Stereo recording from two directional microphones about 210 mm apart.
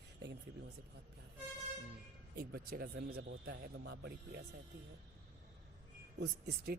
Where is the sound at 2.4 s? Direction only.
45° right (ahead or behind).